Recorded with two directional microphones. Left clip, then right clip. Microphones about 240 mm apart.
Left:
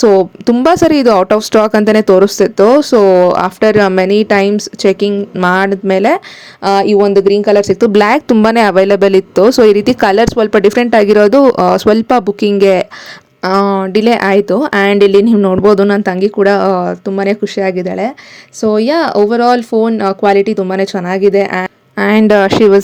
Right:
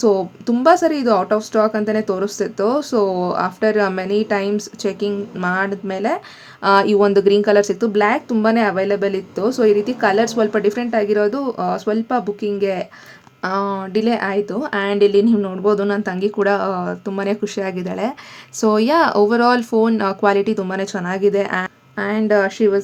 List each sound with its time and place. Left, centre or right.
0.0 s speech: left
6.6 s speech: centre
7.8 s speech: left
22.0 s speech: left